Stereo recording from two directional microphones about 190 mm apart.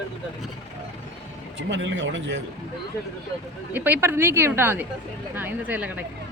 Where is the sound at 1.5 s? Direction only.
70° right (ahead or behind).